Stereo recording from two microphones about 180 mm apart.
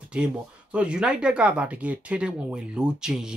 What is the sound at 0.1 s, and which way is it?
Speech, 5° right (ahead or behind).